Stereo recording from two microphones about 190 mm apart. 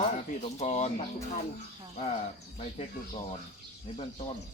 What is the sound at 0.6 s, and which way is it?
Speech, 35° left (ahead or behind).